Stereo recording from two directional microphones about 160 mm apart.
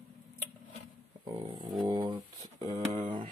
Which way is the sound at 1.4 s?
30° right (ahead or behind).